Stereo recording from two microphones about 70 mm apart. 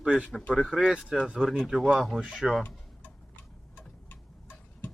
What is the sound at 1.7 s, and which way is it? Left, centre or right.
Speech, centre.